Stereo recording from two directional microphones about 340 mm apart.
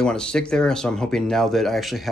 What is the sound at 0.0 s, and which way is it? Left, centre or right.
Speech, centre.